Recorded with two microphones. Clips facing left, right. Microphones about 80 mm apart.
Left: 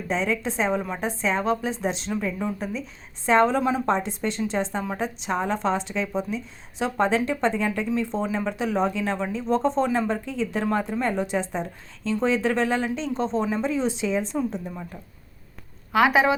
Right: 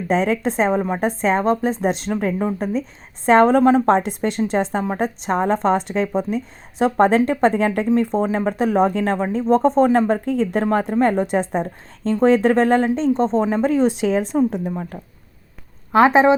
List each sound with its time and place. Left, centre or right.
0.1 s a woman's voice: right
3.8 s a woman's voice: right
4.2 s a woman's voice: right
15.9 s a woman's voice: right